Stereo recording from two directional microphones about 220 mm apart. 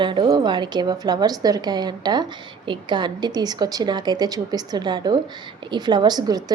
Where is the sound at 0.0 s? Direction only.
20° right (ahead or behind).